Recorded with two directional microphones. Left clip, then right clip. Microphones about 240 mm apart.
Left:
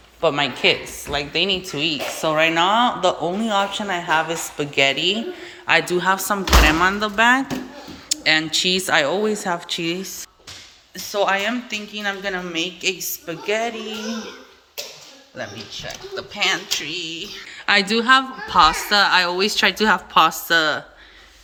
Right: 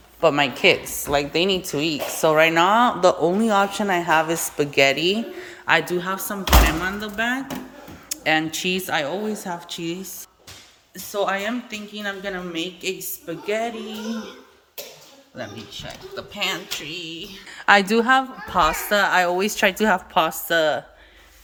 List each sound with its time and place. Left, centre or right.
0.2 s a woman's voice: centre
15.4 s a woman's voice: centre
17.7 s a woman's voice: centre